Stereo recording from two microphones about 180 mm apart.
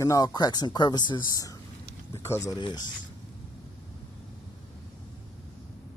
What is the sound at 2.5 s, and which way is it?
Speech, 25° left (ahead or behind).